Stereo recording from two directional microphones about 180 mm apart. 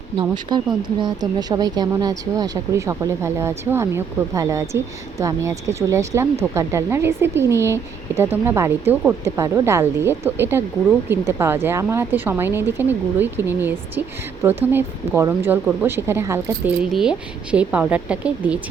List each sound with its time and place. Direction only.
0.5 s a woman's voice: 25° right (ahead or behind); by 18.6 s 5° right (ahead or behind)